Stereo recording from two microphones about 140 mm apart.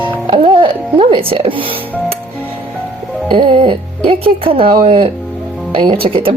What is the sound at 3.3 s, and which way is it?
Speech, 35° right (ahead or behind).